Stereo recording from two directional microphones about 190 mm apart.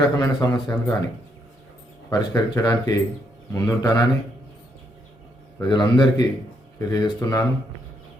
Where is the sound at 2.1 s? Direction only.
20° left (ahead or behind).